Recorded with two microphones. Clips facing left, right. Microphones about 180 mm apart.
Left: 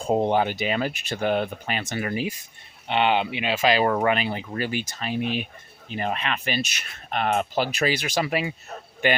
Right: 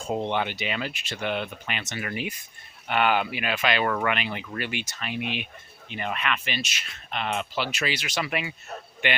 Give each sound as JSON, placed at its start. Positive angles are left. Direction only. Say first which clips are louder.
{"t": 0.0, "sound": "speech", "louder": "left 6 dB", "side_deg": 40}